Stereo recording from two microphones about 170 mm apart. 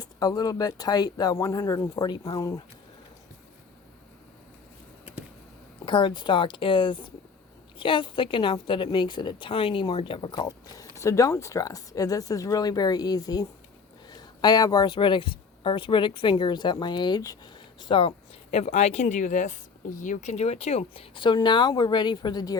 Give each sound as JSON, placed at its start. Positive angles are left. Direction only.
{"t": 0.0, "sound": "speech", "side_deg": 20}
{"t": 5.8, "sound": "speech", "side_deg": 30}
{"t": 18.5, "sound": "speech", "side_deg": 40}